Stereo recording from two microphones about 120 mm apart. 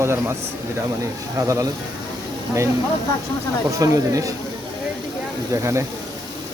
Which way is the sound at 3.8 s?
30° right (ahead or behind).